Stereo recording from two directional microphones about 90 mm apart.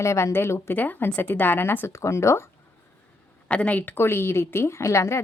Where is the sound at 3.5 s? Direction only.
15° left (ahead or behind); by 5.2 s 35° left (ahead or behind).